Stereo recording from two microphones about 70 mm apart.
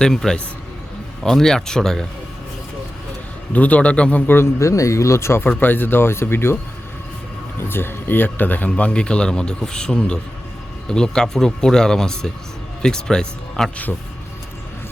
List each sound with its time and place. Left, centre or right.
0.0 s speech: centre
3.5 s a man's voice: left
4.6 s speech: left
5.5 s speech: left
7.6 s speech: left; by 13.8 s centre